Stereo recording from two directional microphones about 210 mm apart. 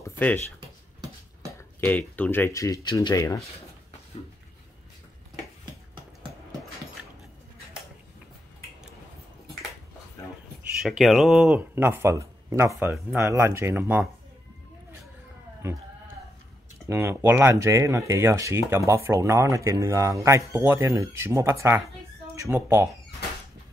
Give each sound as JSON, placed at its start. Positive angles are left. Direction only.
{"t": 0.0, "sound": "speech", "side_deg": 5}
{"t": 1.9, "sound": "speech", "side_deg": 5}
{"t": 10.8, "sound": "speech", "side_deg": 0}
{"t": 16.8, "sound": "speech", "side_deg": -10}